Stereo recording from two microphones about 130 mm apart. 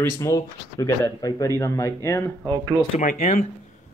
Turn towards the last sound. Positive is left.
turn(degrees=65)  # may be behind; listen again after turning